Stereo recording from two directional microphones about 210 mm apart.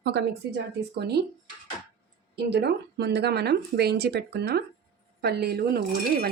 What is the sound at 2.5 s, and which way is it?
Speech, 50° right (ahead or behind).